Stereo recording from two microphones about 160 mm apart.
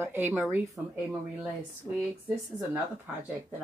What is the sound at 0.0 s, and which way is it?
Speech, 15° right (ahead or behind).